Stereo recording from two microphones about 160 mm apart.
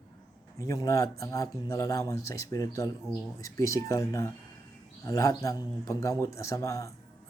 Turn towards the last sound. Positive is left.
turn(degrees=20)  # may be behind; listen again after turning